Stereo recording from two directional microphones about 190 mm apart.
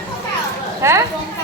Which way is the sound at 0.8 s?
15° right (ahead or behind).